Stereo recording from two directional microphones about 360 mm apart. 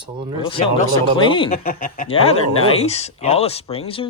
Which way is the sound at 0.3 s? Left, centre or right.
Centre.